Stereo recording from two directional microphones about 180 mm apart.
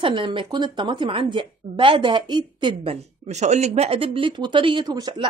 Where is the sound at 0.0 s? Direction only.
25° right (ahead or behind).